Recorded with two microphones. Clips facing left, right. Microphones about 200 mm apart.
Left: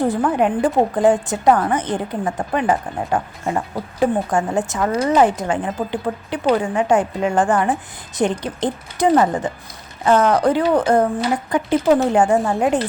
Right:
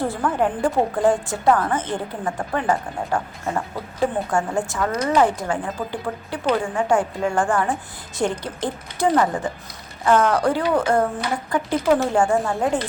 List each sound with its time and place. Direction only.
0.0 s a woman's voice: 15° left (ahead or behind)